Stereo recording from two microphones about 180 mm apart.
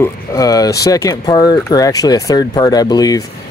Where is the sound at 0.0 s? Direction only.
20° left (ahead or behind).